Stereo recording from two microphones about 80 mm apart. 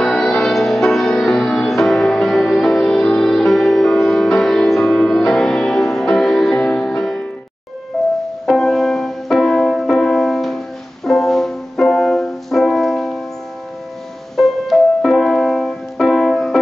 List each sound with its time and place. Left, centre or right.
0.0 s music: centre
14.3 s music: centre